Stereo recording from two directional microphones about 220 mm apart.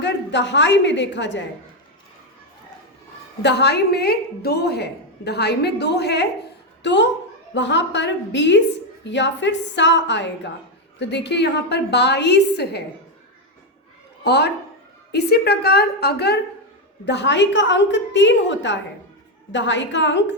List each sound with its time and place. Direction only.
0.0 s a woman's voice: 50° left (ahead or behind)
3.4 s a woman's voice: 50° left (ahead or behind)
14.3 s a woman's voice: 50° left (ahead or behind)